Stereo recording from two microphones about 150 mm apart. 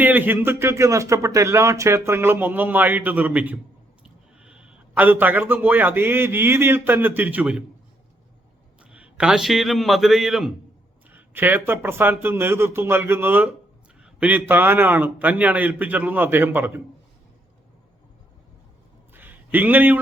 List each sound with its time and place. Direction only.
0.0 s a man's voice: 10° right (ahead or behind)
8.8 s a man's voice: 10° right (ahead or behind)
11.1 s speech: 15° right (ahead or behind)
19.1 s a sound: 10° right (ahead or behind)